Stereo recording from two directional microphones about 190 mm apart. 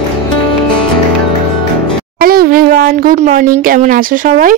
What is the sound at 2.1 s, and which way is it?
Speech, 50° right (ahead or behind).